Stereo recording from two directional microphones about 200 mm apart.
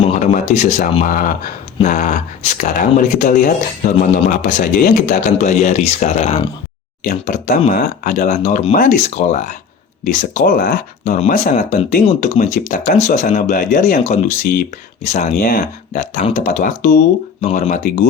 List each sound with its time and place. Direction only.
0.0 s speech: 40° left (ahead or behind)